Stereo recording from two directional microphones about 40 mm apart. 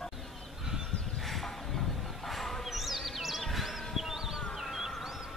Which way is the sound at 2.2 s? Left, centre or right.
Centre.